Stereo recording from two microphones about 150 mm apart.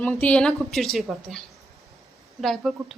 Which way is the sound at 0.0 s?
10° left (ahead or behind).